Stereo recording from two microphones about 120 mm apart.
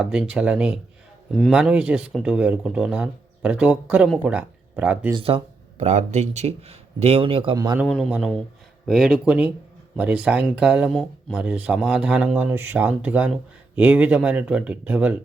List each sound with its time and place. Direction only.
0.0 s speech: 5° right (ahead or behind)
5.1 s speech: 50° right (ahead or behind)
7.5 s a man's voice: 35° right (ahead or behind)
7.9 s speech: centre (ahead or behind)